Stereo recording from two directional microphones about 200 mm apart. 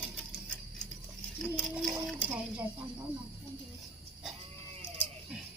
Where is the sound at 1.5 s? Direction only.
5° right (ahead or behind).